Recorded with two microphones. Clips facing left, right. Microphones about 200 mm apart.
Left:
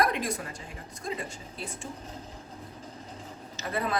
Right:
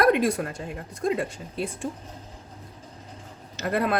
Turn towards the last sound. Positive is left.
turn(degrees=-65)  # may be behind; listen again after turning